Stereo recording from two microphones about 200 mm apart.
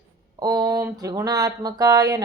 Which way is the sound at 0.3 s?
20° right (ahead or behind).